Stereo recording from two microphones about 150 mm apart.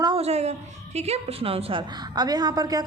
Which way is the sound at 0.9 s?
45° right (ahead or behind).